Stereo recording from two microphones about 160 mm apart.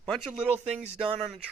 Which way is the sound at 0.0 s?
Centre (ahead or behind).